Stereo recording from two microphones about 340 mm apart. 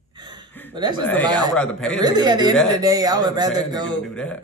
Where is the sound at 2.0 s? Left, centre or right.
Centre.